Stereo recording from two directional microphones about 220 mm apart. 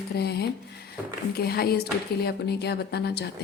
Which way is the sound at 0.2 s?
45° left (ahead or behind).